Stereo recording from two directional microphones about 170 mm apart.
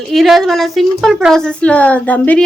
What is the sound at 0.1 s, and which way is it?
A woman's voice, centre (ahead or behind).